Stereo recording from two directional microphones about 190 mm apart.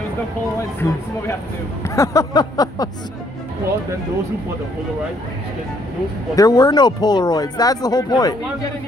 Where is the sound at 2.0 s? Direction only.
20° left (ahead or behind).